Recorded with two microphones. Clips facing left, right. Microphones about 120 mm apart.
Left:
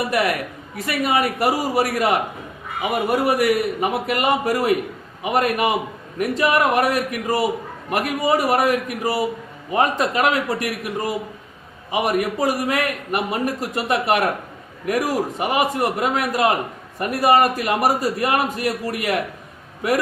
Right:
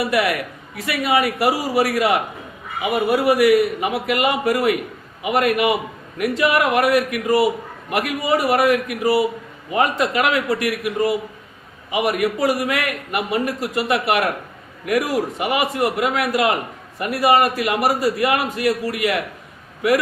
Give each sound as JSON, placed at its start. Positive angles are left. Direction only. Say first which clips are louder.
{"t": 0.1, "sound": "a man's voice", "louder": "right 1 dB", "side_deg": 40}
{"t": 3.2, "sound": "a man's voice", "louder": "right 4 dB", "side_deg": 45}
{"t": 11.9, "sound": "a man's voice", "louder": "right 1 dB", "side_deg": 40}